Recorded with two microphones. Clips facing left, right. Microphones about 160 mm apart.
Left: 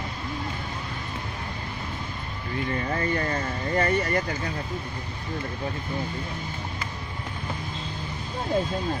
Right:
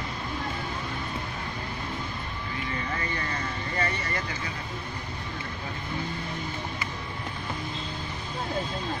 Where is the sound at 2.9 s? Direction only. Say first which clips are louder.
Left 6 dB; 40° left (ahead or behind).